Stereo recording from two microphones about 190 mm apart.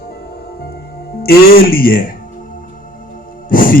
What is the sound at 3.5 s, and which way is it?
Speech, 45° left (ahead or behind).